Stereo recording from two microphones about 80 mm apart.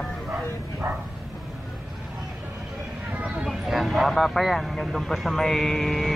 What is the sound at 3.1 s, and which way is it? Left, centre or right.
Speech, centre.